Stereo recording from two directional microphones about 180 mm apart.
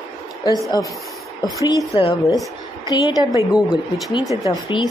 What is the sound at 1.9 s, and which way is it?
Speech, 30° left (ahead or behind).